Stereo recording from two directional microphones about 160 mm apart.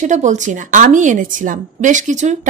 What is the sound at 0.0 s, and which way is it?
A woman's voice, 50° right (ahead or behind).